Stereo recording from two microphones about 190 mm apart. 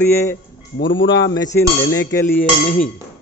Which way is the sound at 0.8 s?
25° left (ahead or behind).